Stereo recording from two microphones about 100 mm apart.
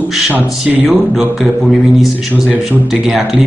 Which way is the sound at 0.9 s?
Centre (ahead or behind).